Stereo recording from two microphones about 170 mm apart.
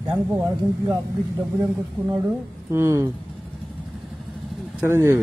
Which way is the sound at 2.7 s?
15° right (ahead or behind).